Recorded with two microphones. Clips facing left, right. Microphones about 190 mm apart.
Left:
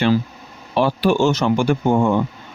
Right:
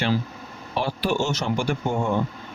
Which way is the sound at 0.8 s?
70° left (ahead or behind).